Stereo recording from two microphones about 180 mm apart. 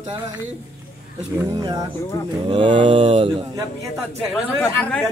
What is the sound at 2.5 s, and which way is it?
Speech, 30° right (ahead or behind).